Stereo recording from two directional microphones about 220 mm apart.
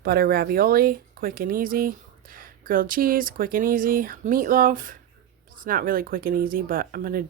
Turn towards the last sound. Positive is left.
turn(degrees=-40)  # may be behind; listen again after turning